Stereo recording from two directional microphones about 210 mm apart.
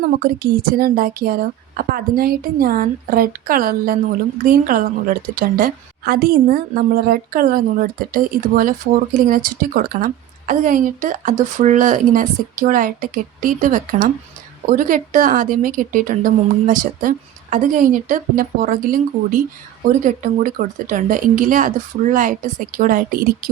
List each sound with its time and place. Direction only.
0.5 s a woman's voice: 45° right (ahead or behind)